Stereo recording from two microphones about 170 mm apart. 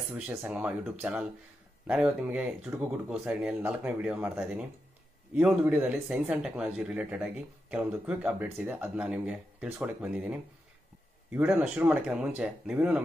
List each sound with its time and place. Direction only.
0.3 s speech: 10° right (ahead or behind)